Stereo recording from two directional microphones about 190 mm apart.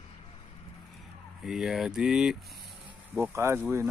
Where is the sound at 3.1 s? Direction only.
15° right (ahead or behind).